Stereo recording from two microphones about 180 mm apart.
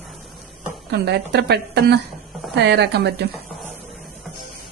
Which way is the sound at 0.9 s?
65° right (ahead or behind).